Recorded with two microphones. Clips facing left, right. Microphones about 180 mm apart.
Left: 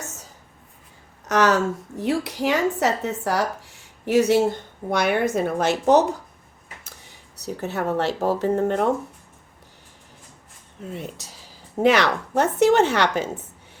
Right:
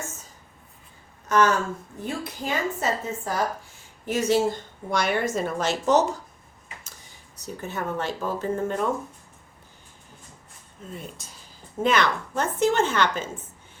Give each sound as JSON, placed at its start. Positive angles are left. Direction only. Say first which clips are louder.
{"t": 1.2, "sound": "a woman's voice", "louder": "left 2 dB", "side_deg": 75}
{"t": 10.9, "sound": "a woman's voice", "louder": "left 4 dB", "side_deg": 70}